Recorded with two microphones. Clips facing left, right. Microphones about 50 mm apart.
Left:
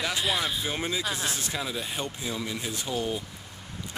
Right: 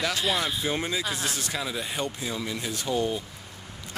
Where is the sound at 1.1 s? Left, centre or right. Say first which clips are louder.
Right 1 dB; left.